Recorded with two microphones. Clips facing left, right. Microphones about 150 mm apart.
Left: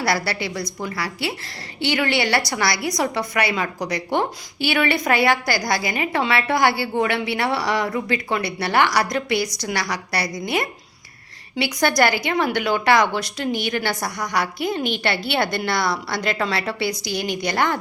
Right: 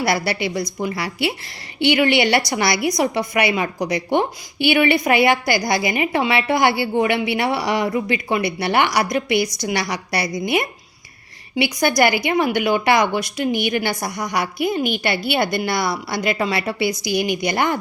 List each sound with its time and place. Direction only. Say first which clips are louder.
0.0 s a woman's voice: right 2 dB; 20° right (ahead or behind)